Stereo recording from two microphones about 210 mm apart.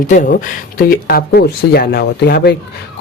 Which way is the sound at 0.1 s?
35° left (ahead or behind).